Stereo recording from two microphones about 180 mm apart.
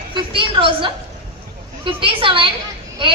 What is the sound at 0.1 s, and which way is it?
A woman's voice, 30° right (ahead or behind).